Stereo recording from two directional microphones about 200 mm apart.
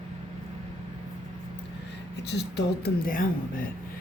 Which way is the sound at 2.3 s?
55° left (ahead or behind).